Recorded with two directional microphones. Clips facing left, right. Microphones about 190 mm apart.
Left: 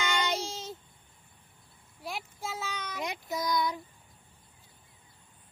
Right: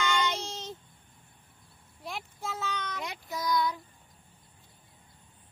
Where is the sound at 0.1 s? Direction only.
20° left (ahead or behind).